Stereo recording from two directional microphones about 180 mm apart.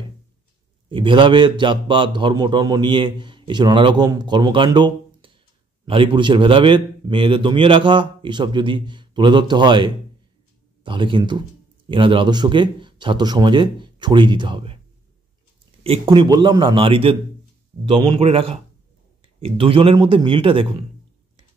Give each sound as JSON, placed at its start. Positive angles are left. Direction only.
{"t": 0.8, "sound": "a man's voice", "side_deg": -30}
{"t": 15.8, "sound": "a man's voice", "side_deg": -30}